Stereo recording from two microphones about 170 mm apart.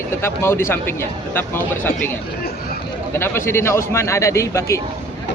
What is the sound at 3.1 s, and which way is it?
A man's voice, 15° left (ahead or behind).